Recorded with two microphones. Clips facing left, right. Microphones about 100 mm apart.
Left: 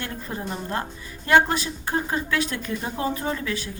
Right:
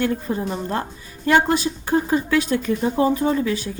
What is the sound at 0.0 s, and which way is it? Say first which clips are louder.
Speech: right 11 dB; 30° right (ahead or behind).